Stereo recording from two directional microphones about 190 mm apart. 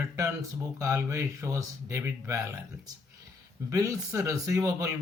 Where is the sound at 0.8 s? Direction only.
15° right (ahead or behind).